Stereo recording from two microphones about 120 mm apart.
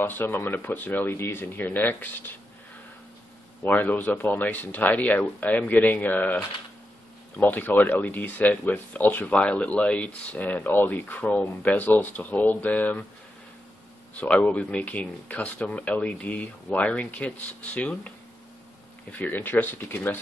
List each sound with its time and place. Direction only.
0.0 s speech: 15° left (ahead or behind)
3.6 s speech: 10° left (ahead or behind)
14.2 s speech: 10° left (ahead or behind)